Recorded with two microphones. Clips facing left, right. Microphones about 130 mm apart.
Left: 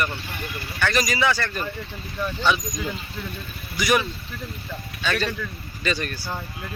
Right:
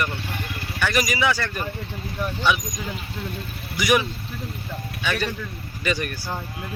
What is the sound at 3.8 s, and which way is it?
Speech, 15° right (ahead or behind).